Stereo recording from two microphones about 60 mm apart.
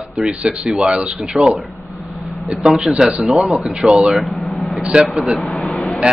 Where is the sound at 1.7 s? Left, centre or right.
Left.